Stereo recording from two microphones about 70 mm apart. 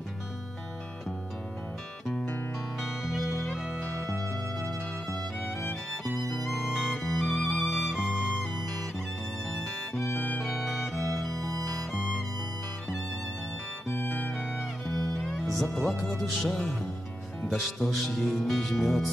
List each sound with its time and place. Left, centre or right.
3.1 s music: centre
6.3 s music: centre
9.9 s music: left
13.8 s music: left
14.6 s music: centre
17.5 s speech: centre